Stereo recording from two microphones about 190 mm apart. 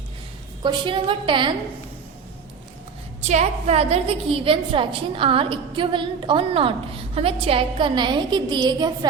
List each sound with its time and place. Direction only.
0.6 s a woman's voice: 25° right (ahead or behind)
3.2 s a woman's voice: 35° right (ahead or behind)